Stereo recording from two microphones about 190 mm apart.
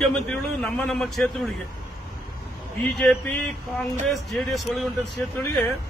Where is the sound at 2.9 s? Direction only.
5° left (ahead or behind).